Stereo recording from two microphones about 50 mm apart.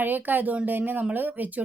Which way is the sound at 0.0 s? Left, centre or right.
Right.